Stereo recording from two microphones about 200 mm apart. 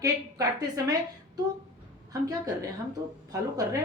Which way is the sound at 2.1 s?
20° right (ahead or behind).